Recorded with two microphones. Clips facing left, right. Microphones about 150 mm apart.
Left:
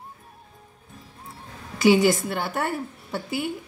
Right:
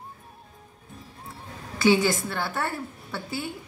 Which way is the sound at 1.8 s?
15° left (ahead or behind).